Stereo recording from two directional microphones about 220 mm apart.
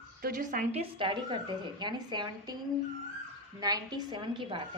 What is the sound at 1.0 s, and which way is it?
A woman's voice, 20° right (ahead or behind).